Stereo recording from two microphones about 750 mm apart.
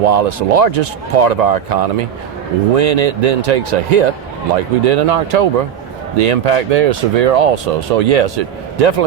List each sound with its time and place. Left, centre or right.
0.0 s speech: right